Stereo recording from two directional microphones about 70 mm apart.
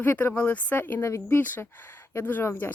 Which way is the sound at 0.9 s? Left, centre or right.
Left.